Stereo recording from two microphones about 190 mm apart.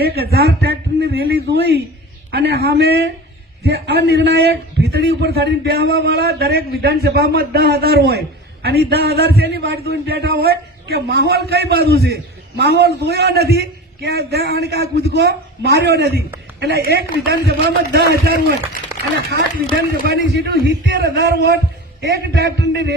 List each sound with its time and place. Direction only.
0.0 s a man's voice: 55° right (ahead or behind)
19.9 s a man's voice: 55° right (ahead or behind)